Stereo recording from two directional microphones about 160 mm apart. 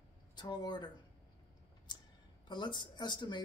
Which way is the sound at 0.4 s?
25° left (ahead or behind).